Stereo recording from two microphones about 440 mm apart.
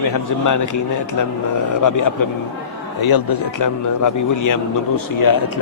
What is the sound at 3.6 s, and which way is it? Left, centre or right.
A man's voice, left.